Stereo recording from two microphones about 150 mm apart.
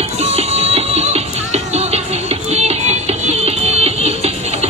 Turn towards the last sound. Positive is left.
turn(degrees=-45)  # may be behind; listen again after turning